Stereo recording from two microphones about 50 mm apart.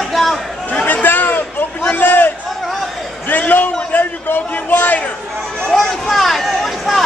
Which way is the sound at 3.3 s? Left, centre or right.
Left.